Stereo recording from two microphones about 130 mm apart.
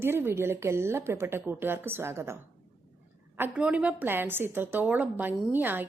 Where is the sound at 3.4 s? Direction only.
10° right (ahead or behind).